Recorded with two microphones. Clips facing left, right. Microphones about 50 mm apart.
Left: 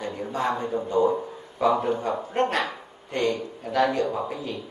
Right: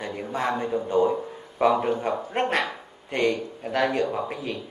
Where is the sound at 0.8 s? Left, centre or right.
Right.